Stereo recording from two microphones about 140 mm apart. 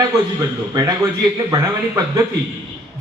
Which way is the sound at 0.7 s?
25° right (ahead or behind).